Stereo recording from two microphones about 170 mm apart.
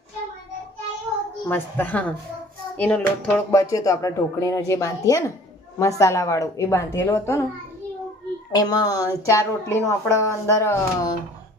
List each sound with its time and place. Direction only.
1.5 s speech: 10° left (ahead or behind)
8.5 s speech: 20° left (ahead or behind)